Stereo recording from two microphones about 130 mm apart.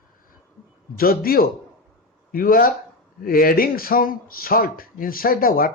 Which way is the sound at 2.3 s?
90° left.